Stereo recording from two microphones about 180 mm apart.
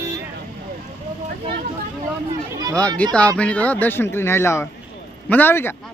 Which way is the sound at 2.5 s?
20° right (ahead or behind).